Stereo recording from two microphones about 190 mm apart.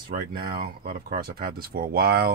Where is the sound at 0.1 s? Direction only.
45° right (ahead or behind).